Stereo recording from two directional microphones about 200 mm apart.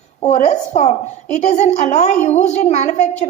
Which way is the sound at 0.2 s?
35° left (ahead or behind).